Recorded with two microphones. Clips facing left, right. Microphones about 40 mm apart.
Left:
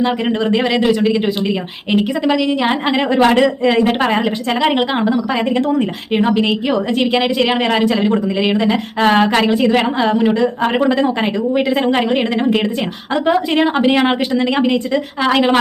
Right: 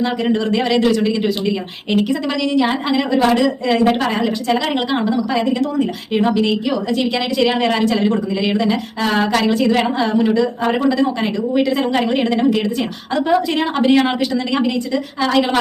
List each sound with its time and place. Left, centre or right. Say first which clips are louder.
0.0 s speech: left 1 dB; centre
3.2 s speech: left 3 dB; left
4.0 s speech: left 2 dB; left
6.3 s speech: left 2 dB; left
8.1 s a woman's voice: left 3 dB; left